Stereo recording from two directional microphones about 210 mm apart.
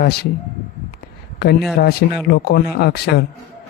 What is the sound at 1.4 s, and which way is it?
Speech, 50° left (ahead or behind).